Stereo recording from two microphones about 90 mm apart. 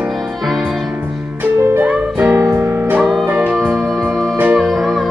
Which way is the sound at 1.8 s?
15° right (ahead or behind).